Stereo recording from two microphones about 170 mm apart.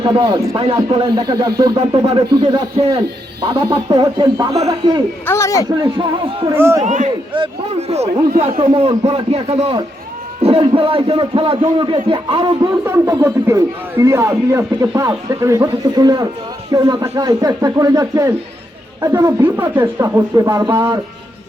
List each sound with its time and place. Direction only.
0.0 s speech: 30° right (ahead or behind)
5.2 s a man's voice: 15° left (ahead or behind)
5.8 s speech: 30° right (ahead or behind)
6.5 s speech: 15° right (ahead or behind)
6.8 s a man's voice: 45° right (ahead or behind)
7.3 s a man's voice: 30° right (ahead or behind)
12.8 s speech: 20° right (ahead or behind)